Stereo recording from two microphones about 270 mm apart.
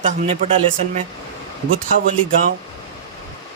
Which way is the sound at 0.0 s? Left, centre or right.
Right.